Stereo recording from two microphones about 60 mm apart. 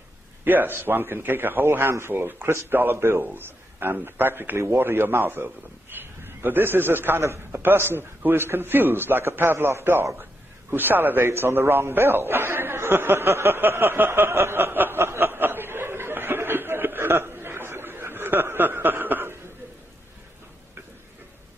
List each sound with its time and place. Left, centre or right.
0.5 s a man's voice: right